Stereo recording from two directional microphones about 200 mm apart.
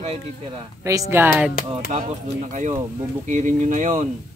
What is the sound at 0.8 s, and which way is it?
Speech, 15° right (ahead or behind).